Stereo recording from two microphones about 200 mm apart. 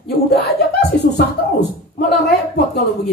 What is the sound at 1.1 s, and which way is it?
Speech, 55° left (ahead or behind).